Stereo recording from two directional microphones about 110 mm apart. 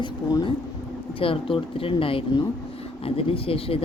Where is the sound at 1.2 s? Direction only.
55° left (ahead or behind).